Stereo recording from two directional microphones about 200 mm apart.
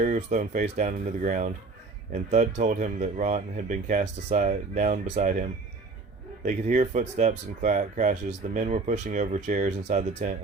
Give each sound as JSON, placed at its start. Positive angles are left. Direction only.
{"t": 0.0, "sound": "speech", "side_deg": -35}
{"t": 2.6, "sound": "speech", "side_deg": -40}